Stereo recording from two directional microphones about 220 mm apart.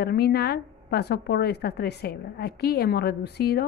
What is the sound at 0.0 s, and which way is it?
A woman's voice, 45° left (ahead or behind).